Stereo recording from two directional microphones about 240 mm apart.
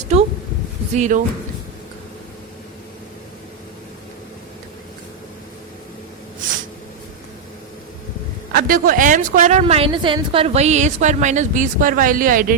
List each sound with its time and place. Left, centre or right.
0.0 s a woman's voice: right
8.5 s a woman's voice: right